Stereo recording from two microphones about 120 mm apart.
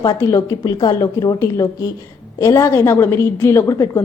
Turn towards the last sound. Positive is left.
turn(degrees=25)  # may be behind; listen again after turning